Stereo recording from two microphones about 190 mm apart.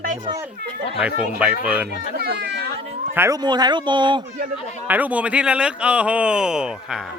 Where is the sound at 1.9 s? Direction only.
45° left (ahead or behind).